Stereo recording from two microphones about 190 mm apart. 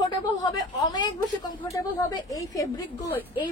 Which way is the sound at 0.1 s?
20° left (ahead or behind).